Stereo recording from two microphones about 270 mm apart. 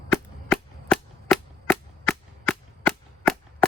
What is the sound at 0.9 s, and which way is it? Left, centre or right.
Cap gun, centre.